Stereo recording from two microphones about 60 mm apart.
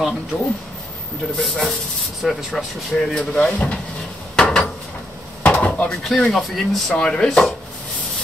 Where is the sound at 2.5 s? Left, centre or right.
Centre.